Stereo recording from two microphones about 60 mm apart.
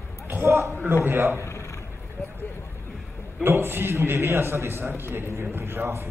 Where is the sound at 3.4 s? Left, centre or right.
Right.